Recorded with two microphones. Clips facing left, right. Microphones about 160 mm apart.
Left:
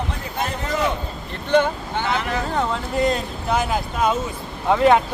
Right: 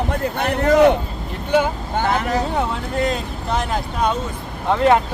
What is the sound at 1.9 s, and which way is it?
Speech, 45° right (ahead or behind).